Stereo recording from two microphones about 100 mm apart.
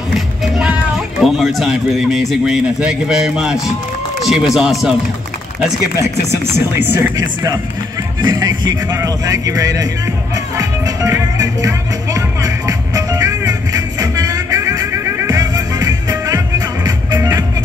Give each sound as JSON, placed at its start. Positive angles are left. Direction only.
{"t": 0.6, "sound": "speech", "side_deg": -5}
{"t": 6.5, "sound": "speech", "side_deg": -25}
{"t": 8.2, "sound": "music", "side_deg": -45}
{"t": 8.9, "sound": "speech", "side_deg": -35}
{"t": 10.3, "sound": "music", "side_deg": -35}
{"t": 15.2, "sound": "music", "side_deg": -40}